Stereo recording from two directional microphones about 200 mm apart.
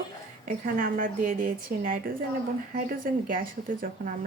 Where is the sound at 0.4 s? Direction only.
45° right (ahead or behind).